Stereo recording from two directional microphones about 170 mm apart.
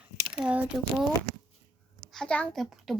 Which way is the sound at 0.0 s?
5° right (ahead or behind).